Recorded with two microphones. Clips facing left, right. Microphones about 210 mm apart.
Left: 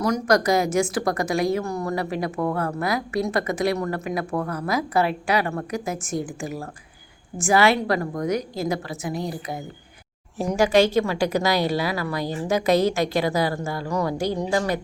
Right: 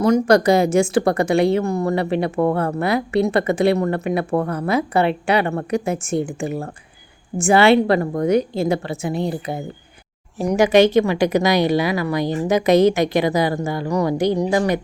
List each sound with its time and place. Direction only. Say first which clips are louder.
0.0 s a woman's voice: right 6 dB; 25° right (ahead or behind)